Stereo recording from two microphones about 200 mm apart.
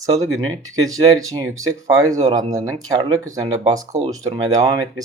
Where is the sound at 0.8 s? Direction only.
20° right (ahead or behind).